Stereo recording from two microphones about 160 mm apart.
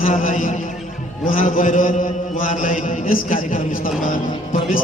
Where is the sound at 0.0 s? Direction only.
60° left (ahead or behind).